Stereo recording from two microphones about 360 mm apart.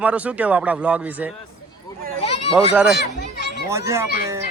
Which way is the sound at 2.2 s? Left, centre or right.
Centre.